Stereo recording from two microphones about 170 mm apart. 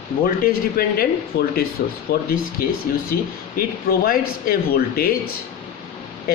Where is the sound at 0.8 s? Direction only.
65° left (ahead or behind).